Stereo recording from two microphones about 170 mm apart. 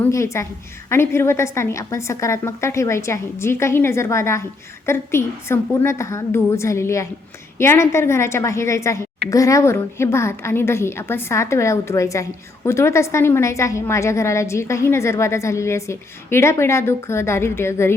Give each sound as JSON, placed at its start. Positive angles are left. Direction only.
{"t": 0.0, "sound": "a woman's voice", "side_deg": 15}